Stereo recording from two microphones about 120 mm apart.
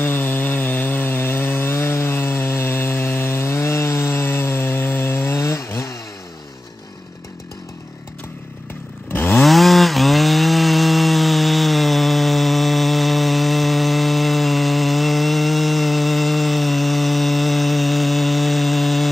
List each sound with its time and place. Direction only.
0.0 s sawing: 15° left (ahead or behind)
9.1 s chainsaw: 15° left (ahead or behind)
9.4 s wood: centre (ahead or behind)